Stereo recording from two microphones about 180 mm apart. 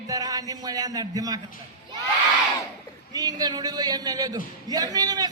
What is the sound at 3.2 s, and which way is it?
A man's voice, 20° right (ahead or behind).